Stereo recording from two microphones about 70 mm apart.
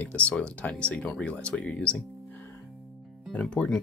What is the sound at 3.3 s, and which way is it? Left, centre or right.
Speech, centre.